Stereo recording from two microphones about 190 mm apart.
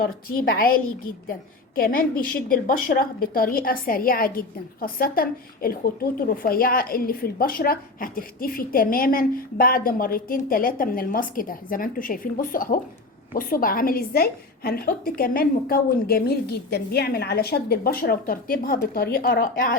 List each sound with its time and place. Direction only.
0.0 s a woman's voice: 50° left (ahead or behind)